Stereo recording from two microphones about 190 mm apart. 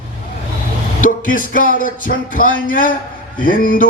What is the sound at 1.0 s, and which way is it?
Mantra, 45° left (ahead or behind).